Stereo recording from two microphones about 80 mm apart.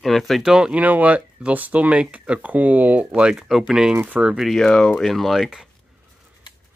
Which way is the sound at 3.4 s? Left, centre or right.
Centre.